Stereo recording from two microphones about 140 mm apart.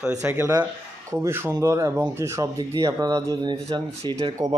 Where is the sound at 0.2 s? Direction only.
15° right (ahead or behind).